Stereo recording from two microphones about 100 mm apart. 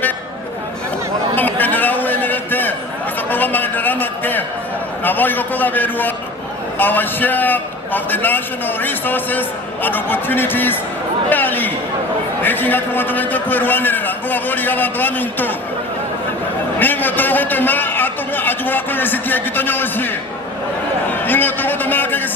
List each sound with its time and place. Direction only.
1.4 s a sound: 20° left (ahead or behind)
5.0 s a man's voice: 20° left (ahead or behind)
16.8 s a man's voice: 20° left (ahead or behind)
21.1 s a man's voice: 20° left (ahead or behind)